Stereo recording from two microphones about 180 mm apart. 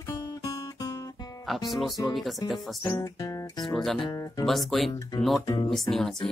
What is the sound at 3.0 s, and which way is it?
Music, 20° left (ahead or behind).